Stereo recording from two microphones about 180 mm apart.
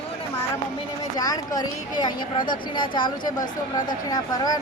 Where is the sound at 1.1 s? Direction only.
20° left (ahead or behind).